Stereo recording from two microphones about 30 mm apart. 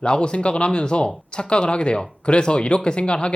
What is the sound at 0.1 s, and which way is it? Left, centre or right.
Speech, left.